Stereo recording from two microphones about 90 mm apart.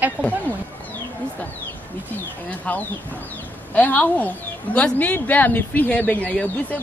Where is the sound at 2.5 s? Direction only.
15° left (ahead or behind).